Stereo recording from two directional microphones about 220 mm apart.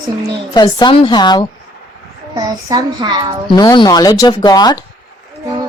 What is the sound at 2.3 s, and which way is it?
A child's voice, 15° right (ahead or behind).